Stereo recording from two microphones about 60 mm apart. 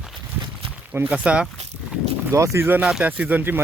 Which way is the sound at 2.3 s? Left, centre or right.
Right.